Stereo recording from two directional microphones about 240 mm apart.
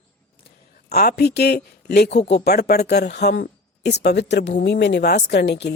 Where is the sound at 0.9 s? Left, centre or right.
Left.